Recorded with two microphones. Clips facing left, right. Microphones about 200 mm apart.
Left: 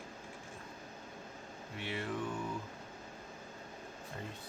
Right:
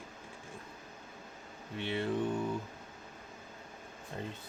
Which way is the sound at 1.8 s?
25° right (ahead or behind).